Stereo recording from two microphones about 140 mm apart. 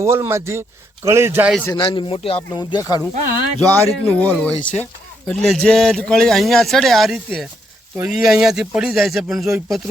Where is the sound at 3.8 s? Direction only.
20° right (ahead or behind).